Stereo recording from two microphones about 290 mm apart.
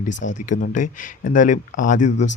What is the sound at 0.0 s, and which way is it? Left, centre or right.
Speech, left.